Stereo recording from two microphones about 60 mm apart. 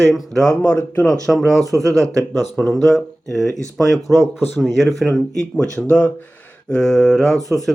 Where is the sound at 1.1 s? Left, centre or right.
Centre.